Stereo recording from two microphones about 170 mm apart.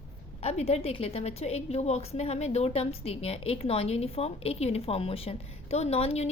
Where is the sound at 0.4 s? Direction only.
40° left (ahead or behind).